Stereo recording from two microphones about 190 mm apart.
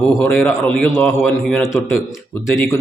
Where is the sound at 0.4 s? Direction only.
15° left (ahead or behind).